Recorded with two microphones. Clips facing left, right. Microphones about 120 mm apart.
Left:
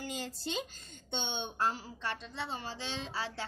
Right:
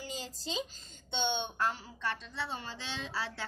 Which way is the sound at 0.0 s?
60° left (ahead or behind).